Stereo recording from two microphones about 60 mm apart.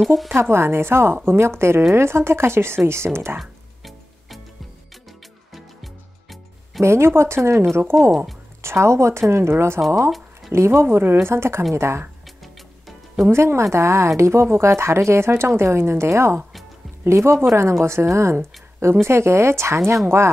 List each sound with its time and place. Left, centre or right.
0.0 s speech: centre
0.3 s a woman's voice: right
3.3 s music: centre
6.8 s a woman's voice: right
10.0 s a sound: centre
10.5 s a woman's voice: right
12.8 s music: centre
13.3 s a woman's voice: right